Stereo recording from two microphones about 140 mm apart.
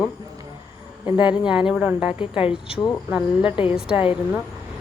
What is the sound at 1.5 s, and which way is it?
Speech, 5° right (ahead or behind).